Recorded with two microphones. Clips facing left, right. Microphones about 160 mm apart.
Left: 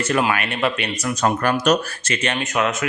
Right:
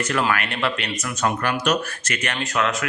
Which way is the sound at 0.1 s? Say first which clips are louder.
Left 4 dB; 20° left (ahead or behind).